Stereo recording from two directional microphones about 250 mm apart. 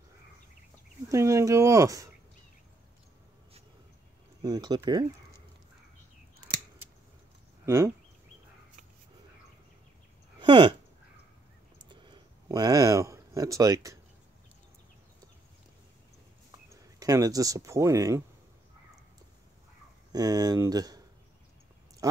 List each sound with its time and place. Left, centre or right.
1.0 s speech: centre
4.4 s speech: centre
7.6 s speech: centre
10.4 s speech: centre
11.8 s a sound: centre
16.7 s speech: centre
20.1 s speech: centre
22.0 s a sound: centre